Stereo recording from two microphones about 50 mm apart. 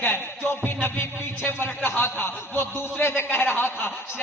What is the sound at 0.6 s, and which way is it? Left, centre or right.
A man's voice, left.